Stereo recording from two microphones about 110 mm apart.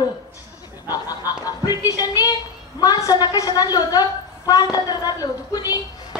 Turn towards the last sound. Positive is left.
turn(degrees=35)  # may be behind; listen again after turning